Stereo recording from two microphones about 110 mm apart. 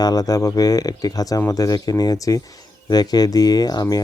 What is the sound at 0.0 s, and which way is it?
Speech, 35° left (ahead or behind).